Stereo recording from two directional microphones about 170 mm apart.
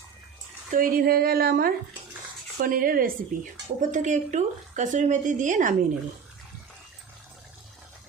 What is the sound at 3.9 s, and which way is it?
Speech, 45° right (ahead or behind).